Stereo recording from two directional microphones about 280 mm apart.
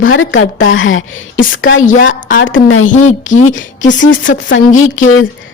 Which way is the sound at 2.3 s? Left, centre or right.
Left.